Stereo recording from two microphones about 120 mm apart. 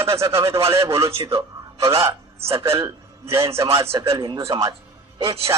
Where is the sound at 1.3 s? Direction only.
25° right (ahead or behind).